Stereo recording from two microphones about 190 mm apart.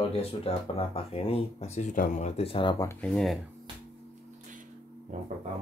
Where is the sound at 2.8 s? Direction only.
5° left (ahead or behind).